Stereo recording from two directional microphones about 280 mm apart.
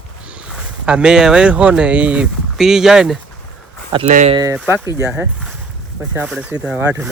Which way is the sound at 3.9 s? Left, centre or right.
Right.